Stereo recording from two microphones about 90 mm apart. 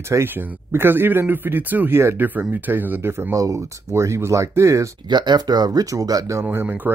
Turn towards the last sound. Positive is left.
turn(degrees=-20)  # may be behind; listen again after turning